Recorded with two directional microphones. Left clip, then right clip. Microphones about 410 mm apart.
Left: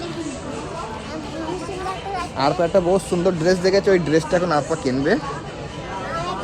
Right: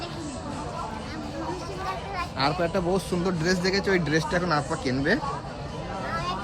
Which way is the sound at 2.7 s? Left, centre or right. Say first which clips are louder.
Left 9 dB; centre.